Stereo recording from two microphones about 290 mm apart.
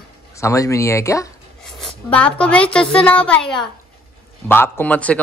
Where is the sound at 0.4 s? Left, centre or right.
Centre.